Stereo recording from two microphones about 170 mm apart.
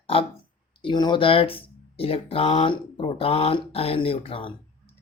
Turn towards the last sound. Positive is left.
turn(degrees=35)  # may be behind; listen again after turning